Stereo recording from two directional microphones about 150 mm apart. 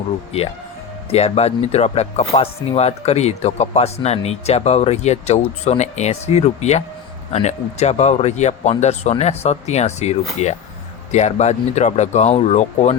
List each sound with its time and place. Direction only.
0.3 s speech: 45° left (ahead or behind)